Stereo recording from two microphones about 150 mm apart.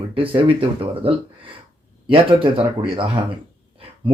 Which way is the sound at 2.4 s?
35° right (ahead or behind).